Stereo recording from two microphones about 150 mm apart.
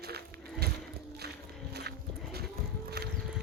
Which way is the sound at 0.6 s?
90° right.